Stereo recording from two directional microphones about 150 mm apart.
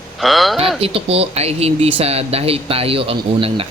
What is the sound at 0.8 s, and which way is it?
Speech, 40° right (ahead or behind).